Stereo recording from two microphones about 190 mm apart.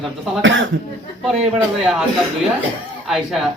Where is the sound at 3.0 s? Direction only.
Centre (ahead or behind).